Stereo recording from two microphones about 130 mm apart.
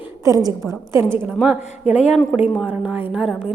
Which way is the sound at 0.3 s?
30° right (ahead or behind).